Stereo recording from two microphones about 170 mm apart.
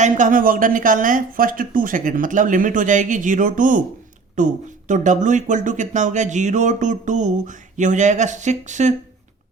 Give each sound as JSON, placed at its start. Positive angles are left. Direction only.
{"t": 0.0, "sound": "speech", "side_deg": -50}